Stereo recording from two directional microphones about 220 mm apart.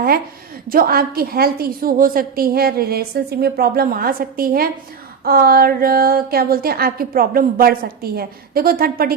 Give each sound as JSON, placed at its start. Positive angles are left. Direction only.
{"t": 0.7, "sound": "a woman's voice", "side_deg": -40}